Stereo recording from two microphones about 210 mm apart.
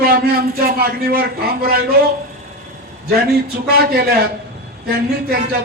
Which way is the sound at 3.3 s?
45° right (ahead or behind).